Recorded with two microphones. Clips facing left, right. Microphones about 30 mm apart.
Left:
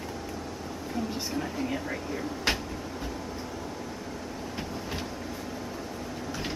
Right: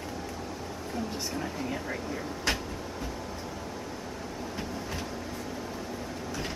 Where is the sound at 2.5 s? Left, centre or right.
Left.